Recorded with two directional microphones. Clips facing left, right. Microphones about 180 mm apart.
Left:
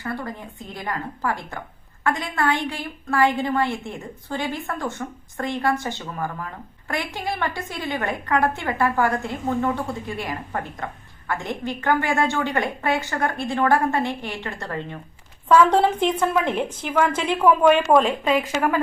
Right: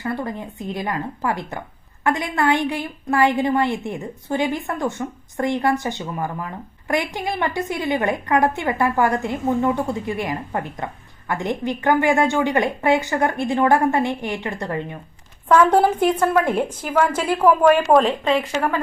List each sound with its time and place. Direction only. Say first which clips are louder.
0.0 s a woman's voice: right 4 dB; 20° right (ahead or behind); by 18.4 s centre (ahead or behind)